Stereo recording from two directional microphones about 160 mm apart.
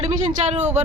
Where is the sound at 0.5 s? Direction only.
45° right (ahead or behind).